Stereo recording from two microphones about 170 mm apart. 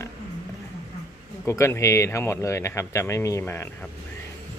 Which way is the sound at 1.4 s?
15° left (ahead or behind).